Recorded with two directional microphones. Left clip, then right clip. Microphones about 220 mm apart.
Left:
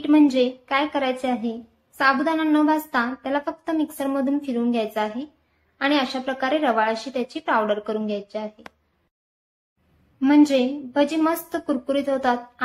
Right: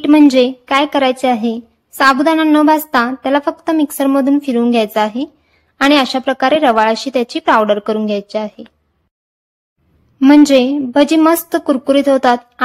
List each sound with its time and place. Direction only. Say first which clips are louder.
0.0 s speech: right 9 dB; 50° right (ahead or behind)
10.2 s speech: right 9 dB; 50° right (ahead or behind)